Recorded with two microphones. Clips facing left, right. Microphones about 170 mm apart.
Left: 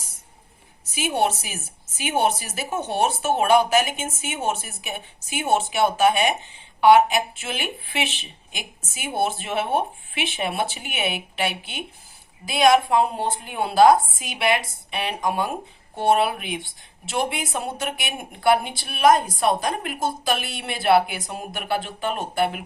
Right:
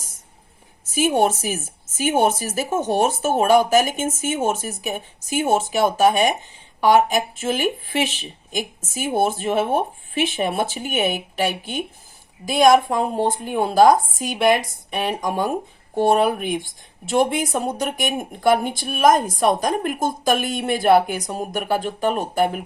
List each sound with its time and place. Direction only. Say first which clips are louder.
0.9 s speech: right 5 dB; 45° right (ahead or behind)